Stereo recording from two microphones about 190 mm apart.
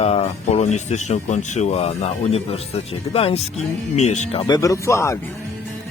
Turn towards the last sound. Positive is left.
turn(degrees=15)  # may be behind; listen again after turning